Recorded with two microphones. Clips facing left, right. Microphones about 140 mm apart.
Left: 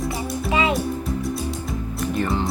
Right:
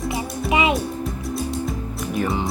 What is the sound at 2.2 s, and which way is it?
Music, 5° right (ahead or behind).